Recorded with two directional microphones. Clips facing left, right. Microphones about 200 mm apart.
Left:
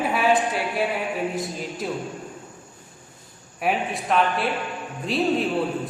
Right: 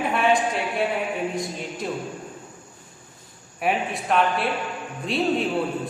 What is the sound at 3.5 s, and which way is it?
A woman's voice, centre (ahead or behind).